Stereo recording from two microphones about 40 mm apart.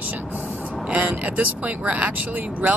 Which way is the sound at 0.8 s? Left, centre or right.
Right.